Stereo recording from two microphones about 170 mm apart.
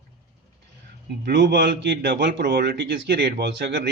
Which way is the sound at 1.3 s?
80° right.